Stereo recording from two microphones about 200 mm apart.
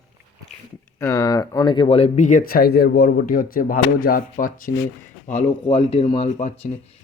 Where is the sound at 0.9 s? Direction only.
15° left (ahead or behind).